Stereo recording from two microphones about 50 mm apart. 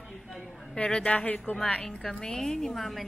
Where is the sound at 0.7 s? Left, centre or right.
Centre.